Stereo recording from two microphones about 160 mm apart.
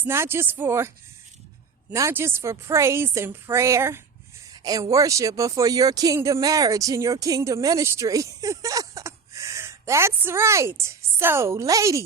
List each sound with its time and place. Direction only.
0.0 s a woman's voice: 15° right (ahead or behind)
1.9 s a woman's voice: 15° right (ahead or behind)